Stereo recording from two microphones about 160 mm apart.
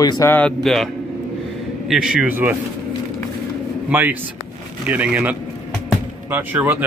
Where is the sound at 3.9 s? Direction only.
10° right (ahead or behind).